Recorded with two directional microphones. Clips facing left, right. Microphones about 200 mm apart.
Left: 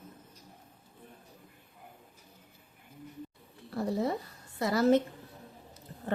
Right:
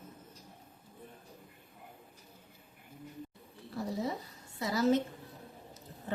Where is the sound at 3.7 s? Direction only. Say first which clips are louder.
Left 5 dB; 60° left (ahead or behind).